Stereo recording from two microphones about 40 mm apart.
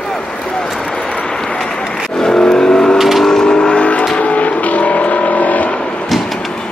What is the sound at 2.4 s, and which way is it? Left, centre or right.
Vehicle, left.